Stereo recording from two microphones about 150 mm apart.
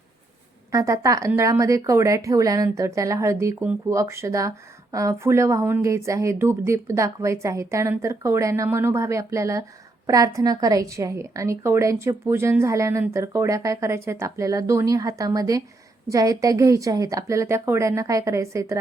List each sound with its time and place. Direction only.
0.7 s speech: 20° right (ahead or behind)